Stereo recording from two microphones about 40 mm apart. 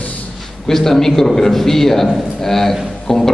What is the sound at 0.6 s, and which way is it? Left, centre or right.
A man's voice, centre.